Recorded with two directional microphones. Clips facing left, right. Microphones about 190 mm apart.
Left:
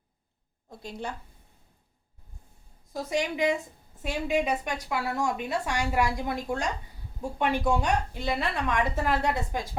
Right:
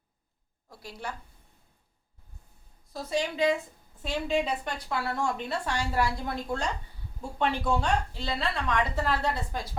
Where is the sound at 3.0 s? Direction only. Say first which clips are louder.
Even; 15° left (ahead or behind).